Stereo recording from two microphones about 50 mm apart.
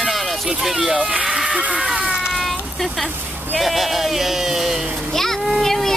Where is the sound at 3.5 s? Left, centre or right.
Centre.